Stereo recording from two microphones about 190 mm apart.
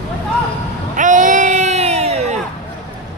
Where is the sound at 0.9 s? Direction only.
40° right (ahead or behind).